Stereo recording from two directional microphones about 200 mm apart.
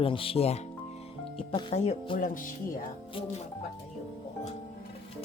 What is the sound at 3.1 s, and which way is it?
Speech, 25° left (ahead or behind).